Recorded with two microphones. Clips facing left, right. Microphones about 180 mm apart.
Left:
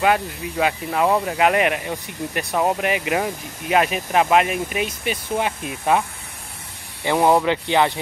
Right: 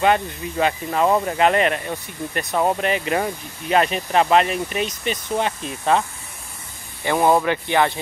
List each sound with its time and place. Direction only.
0.0 s speech: 5° left (ahead or behind)
7.1 s speech: 15° left (ahead or behind)